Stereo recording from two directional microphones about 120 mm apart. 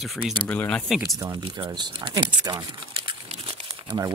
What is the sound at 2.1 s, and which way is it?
Crumpling, 35° right (ahead or behind).